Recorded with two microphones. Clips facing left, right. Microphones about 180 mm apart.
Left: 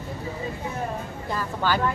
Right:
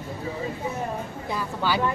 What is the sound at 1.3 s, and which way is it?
Speech, 10° right (ahead or behind).